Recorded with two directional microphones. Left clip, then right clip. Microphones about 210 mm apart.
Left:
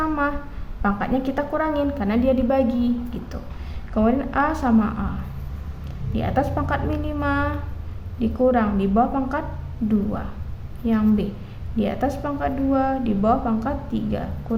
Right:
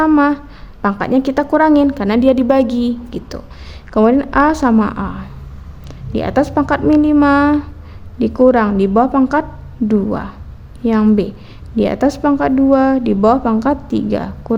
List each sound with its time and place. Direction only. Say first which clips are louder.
0.0 s a woman's voice: right 11 dB; 50° right (ahead or behind)
6.1 s a woman's voice: right 8 dB; 50° right (ahead or behind)